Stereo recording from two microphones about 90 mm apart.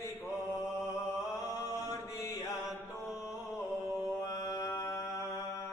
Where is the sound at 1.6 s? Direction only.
35° left (ahead or behind).